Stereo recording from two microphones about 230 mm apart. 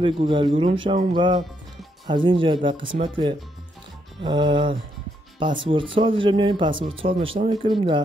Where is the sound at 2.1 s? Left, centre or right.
Right.